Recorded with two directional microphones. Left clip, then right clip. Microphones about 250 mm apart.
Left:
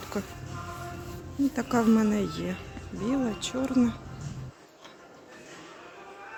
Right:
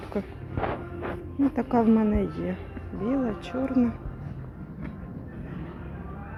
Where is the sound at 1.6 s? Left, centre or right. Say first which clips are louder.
Right 2 dB; centre.